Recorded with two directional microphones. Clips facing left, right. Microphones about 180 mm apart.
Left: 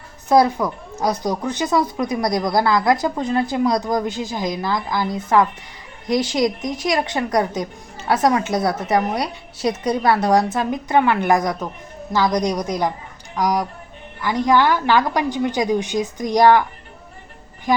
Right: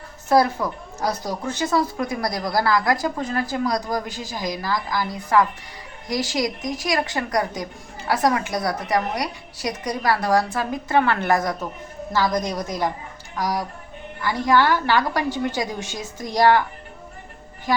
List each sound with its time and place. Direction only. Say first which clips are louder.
0.3 s a woman's voice: left 3 dB; 20° left (ahead or behind)
14.3 s a woman's voice: left 2 dB; 15° left (ahead or behind)